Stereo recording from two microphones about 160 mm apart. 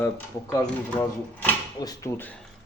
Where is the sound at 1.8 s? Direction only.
20° left (ahead or behind).